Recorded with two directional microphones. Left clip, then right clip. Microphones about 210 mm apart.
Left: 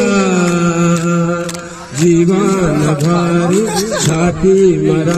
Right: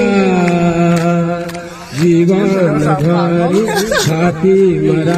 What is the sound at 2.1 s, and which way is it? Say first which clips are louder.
Mantra: even; 40° left (ahead or behind).